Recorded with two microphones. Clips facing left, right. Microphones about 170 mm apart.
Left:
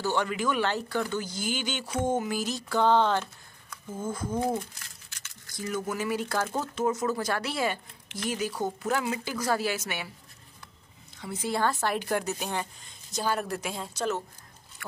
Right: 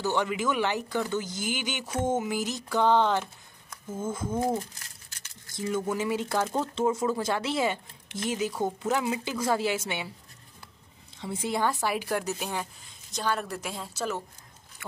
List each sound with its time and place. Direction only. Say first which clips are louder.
0.0 s speech: even; 15° right (ahead or behind)
4.3 s a woman's voice: right 1 dB; centre (ahead or behind)
4.7 s a woman's voice: even; 30° right (ahead or behind)
11.1 s a woman's voice: even; 25° right (ahead or behind); by 14.1 s centre (ahead or behind)
14.8 s speech: right 1 dB; 20° right (ahead or behind)